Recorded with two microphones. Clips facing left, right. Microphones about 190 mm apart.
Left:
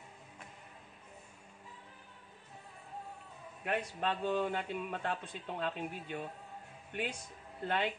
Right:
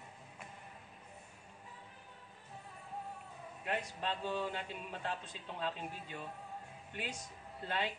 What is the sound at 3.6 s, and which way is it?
Speech, 55° left (ahead or behind).